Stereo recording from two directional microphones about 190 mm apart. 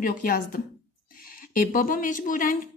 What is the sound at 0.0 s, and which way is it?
A woman's voice, 45° left (ahead or behind).